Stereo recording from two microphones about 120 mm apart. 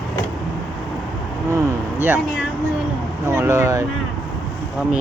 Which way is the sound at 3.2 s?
20° right (ahead or behind).